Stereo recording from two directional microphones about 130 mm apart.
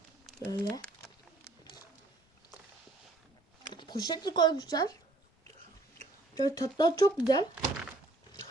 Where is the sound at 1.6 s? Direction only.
30° left (ahead or behind).